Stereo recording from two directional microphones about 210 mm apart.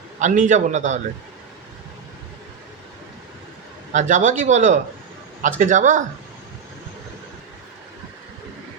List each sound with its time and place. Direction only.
0.2 s speech: 35° right (ahead or behind)
3.9 s speech: 35° right (ahead or behind)